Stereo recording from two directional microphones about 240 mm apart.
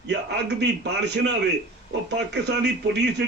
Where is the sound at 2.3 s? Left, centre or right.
Right.